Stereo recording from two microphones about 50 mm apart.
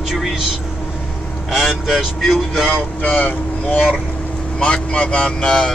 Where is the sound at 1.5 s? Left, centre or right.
Centre.